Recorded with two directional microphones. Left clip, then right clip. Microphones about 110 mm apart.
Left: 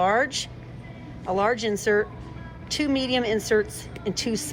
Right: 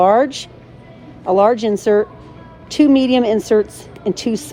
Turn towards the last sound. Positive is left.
turn(degrees=-25)  # may be behind; listen again after turning